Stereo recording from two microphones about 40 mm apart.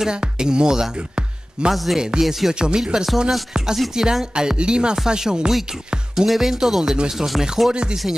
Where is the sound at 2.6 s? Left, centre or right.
Right; by 7.7 s centre.